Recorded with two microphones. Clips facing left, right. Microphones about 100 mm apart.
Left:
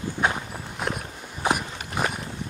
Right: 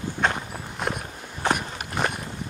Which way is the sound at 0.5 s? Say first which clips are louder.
Right 1 dB; centre (ahead or behind).